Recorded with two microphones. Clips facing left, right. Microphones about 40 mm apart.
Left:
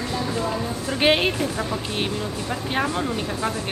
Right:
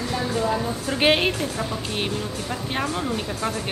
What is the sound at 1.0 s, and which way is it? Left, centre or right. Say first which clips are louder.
Speech: left 1 dB; centre.